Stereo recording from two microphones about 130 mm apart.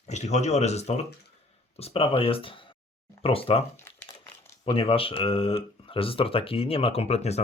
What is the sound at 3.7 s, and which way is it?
Crumpling, 20° left (ahead or behind).